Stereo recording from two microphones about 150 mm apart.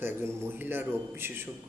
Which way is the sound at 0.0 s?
15° right (ahead or behind).